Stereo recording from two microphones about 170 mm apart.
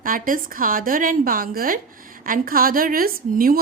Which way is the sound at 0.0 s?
55° right (ahead or behind).